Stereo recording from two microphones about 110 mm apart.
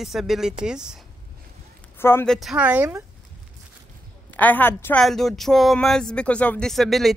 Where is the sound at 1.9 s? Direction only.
20° left (ahead or behind).